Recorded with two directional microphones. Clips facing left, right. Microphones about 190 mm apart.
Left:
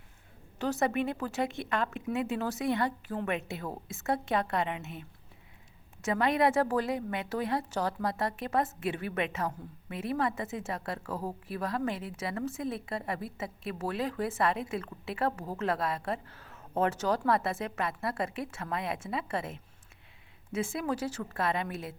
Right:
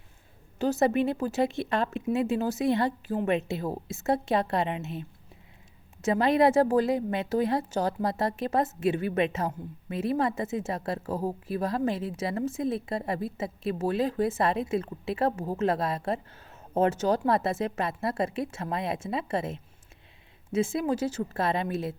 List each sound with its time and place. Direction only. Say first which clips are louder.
0.6 s a woman's voice: right 5 dB; 25° right (ahead or behind)